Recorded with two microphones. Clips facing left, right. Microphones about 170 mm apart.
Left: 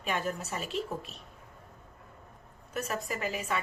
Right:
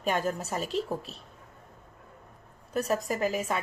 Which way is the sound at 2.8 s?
40° right (ahead or behind).